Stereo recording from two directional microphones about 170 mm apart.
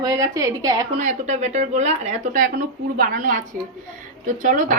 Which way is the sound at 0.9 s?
45° right (ahead or behind).